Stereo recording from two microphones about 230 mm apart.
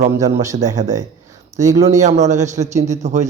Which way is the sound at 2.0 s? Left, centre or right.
Right.